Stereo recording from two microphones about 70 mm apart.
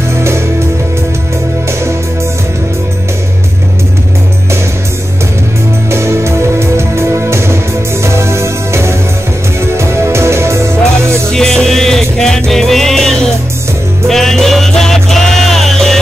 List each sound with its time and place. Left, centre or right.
0.1 s music: right
5.9 s music: right
11.3 s music: centre